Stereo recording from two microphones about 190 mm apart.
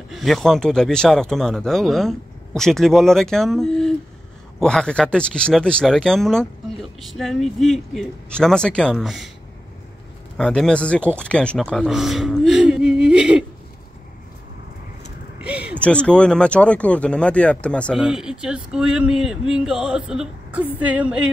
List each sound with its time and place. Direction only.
0.1 s speech: centre (ahead or behind)
10.3 s speech: 5° left (ahead or behind)
15.4 s a sound: 5° right (ahead or behind)
15.8 s speech: 5° left (ahead or behind)